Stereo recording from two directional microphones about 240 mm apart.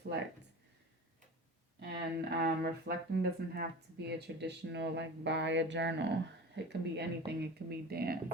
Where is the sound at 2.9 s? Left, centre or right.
Right.